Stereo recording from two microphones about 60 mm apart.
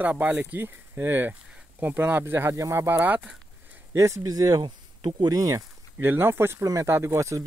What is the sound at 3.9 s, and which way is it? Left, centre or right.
Speech, right.